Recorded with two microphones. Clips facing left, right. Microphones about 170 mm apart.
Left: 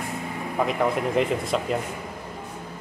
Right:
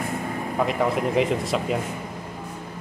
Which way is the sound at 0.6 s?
Centre (ahead or behind).